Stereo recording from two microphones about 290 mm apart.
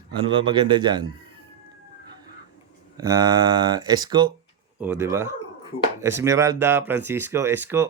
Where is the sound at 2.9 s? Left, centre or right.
Centre.